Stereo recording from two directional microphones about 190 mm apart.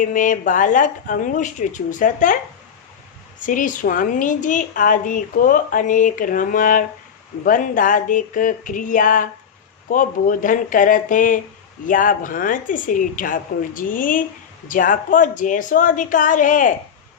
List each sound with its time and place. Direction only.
0.0 s a woman's voice: 45° left (ahead or behind)
3.4 s a woman's voice: 45° left (ahead or behind)